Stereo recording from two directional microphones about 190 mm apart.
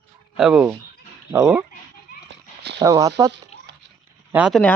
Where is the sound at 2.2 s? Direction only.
65° right (ahead or behind).